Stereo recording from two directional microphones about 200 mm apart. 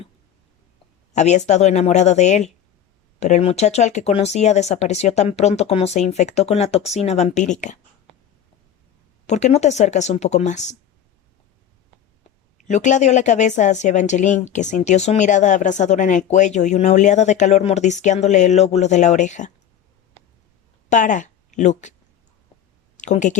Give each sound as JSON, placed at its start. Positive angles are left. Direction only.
{"t": 1.1, "sound": "a woman's voice", "side_deg": 35}
{"t": 9.2, "sound": "a woman's voice", "side_deg": 35}
{"t": 12.6, "sound": "a woman's voice", "side_deg": 35}
{"t": 20.9, "sound": "a woman's voice", "side_deg": 40}
{"t": 23.0, "sound": "speech", "side_deg": 35}